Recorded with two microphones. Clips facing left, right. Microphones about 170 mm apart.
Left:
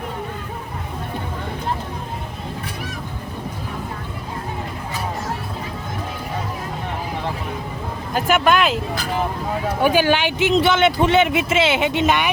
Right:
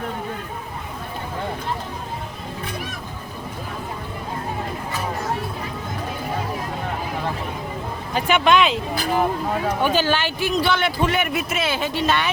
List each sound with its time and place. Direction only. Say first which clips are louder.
8.1 s speech: even; 5° left (ahead or behind); by 11.3 s 25° left (ahead or behind)
11.3 s speech: left 4 dB; 90° left
11.5 s speech: left 6 dB; 25° left (ahead or behind)